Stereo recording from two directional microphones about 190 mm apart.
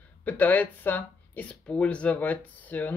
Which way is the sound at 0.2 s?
10° left (ahead or behind).